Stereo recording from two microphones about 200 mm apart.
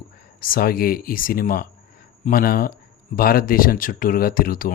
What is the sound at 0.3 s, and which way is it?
Speech, 45° left (ahead or behind).